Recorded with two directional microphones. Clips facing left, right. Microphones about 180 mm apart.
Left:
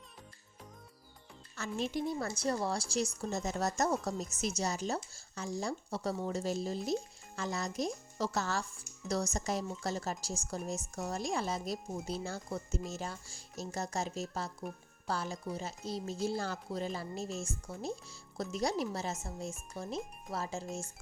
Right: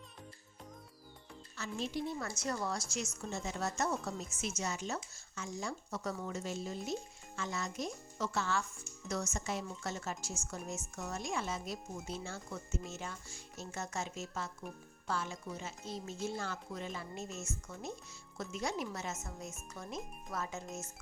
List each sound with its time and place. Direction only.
1.5 s speech: 50° left (ahead or behind)
2.1 s speech: 35° left (ahead or behind)